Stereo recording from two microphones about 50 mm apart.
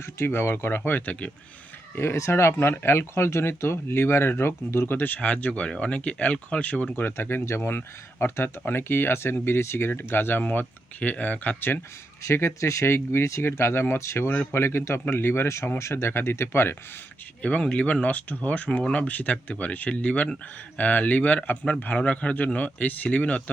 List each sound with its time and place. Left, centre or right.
0.0 s speech: left
2.1 s speech: left
4.9 s speech: left
6.9 s speech: left
7.8 s speech: left
10.4 s speech: left
12.2 s speech: left
17.4 s speech: left